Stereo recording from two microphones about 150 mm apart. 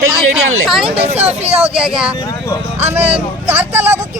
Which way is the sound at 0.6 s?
Centre (ahead or behind).